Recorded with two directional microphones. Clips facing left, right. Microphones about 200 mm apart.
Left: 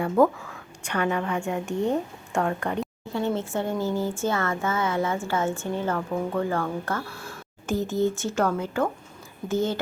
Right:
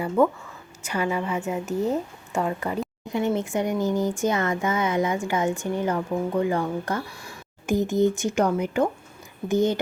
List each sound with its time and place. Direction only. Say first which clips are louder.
0.8 s a woman's voice: even; 5° right (ahead or behind)
3.1 s speech: right 3 dB; 15° right (ahead or behind)